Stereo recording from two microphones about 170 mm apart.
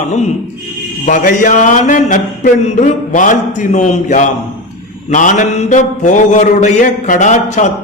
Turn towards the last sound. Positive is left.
turn(degrees=45)  # may be behind; listen again after turning